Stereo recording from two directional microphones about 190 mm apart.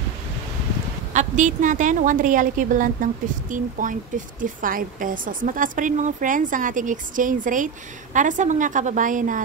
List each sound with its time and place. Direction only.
1.1 s speech: 40° right (ahead or behind)